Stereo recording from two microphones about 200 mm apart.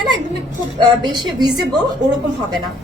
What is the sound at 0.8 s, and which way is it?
Speech, 20° right (ahead or behind).